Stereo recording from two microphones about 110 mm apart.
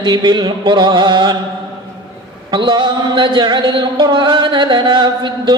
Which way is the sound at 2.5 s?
45° right (ahead or behind).